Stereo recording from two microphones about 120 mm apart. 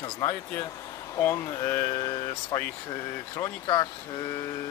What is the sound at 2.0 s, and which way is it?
Speech, 40° left (ahead or behind).